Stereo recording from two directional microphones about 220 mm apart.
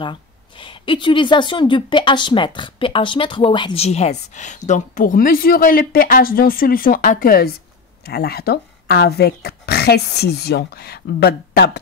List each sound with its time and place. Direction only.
0.0 s speech: 20° left (ahead or behind); by 11.8 s 50° left (ahead or behind)